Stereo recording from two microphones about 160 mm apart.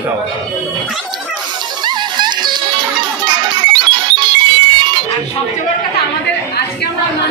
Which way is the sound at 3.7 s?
30° right (ahead or behind).